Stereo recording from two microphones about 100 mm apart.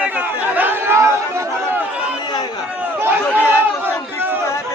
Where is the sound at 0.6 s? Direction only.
20° right (ahead or behind).